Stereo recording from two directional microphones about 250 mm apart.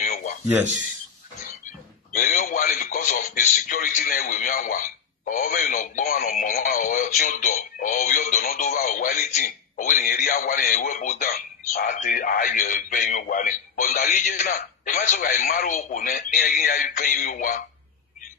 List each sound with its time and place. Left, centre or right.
0.0 s a sound: left
2.1 s radio: left
5.4 s speech: left